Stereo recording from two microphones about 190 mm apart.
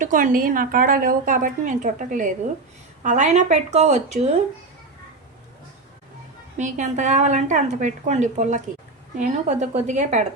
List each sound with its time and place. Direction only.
0.0 s a woman's voice: 45° right (ahead or behind)
6.6 s a woman's voice: 40° right (ahead or behind)